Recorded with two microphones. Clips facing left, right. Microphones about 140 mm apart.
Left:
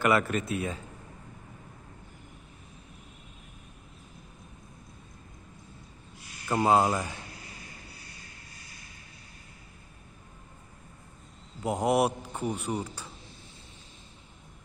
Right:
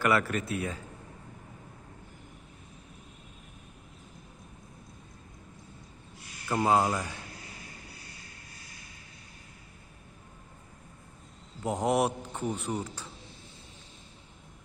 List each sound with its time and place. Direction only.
0.0 s speech: 20° left (ahead or behind)
6.5 s speech: 25° left (ahead or behind)
11.6 s a man's voice: 10° left (ahead or behind)